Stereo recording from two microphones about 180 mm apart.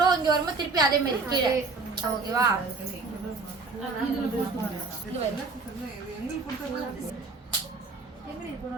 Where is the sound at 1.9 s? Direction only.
20° right (ahead or behind).